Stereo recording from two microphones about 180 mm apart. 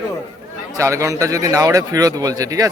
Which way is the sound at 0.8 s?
15° right (ahead or behind).